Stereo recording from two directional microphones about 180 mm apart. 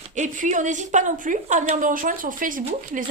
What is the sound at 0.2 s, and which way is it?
Speech, 45° right (ahead or behind).